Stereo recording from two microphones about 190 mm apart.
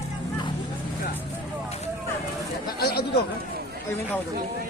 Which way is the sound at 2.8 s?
55° left (ahead or behind).